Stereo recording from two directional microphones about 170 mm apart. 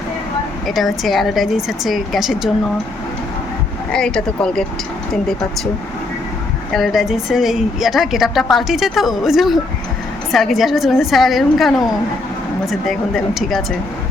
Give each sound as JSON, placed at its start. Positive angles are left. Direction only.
{"t": 0.7, "sound": "a woman's voice", "side_deg": 0}
{"t": 3.9, "sound": "a woman's voice", "side_deg": 5}
{"t": 6.7, "sound": "a woman's voice", "side_deg": 0}